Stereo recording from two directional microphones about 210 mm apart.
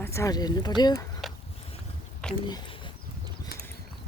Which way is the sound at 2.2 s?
5° left (ahead or behind).